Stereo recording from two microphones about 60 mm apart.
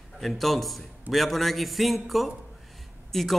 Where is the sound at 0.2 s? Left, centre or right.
Centre.